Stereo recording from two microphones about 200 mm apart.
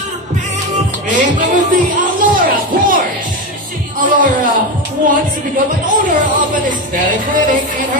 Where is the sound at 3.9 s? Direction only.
40° right (ahead or behind).